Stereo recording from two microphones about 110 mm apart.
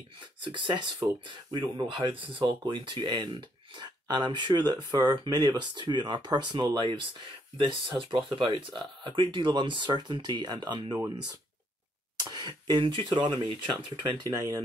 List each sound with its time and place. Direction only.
0.4 s speech: 45° right (ahead or behind)
12.2 s speech: 35° right (ahead or behind)